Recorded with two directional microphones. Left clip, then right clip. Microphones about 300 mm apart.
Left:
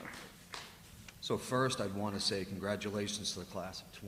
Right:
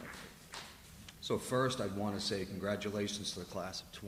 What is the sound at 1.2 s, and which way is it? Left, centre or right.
A man's voice, centre.